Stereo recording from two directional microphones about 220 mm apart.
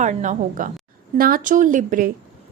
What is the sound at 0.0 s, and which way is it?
A woman's voice, 35° right (ahead or behind).